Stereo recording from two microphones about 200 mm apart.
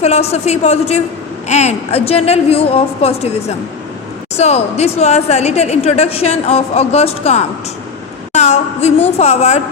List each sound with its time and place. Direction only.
0.0 s a woman's voice: 30° left (ahead or behind)
4.4 s a woman's voice: 30° left (ahead or behind)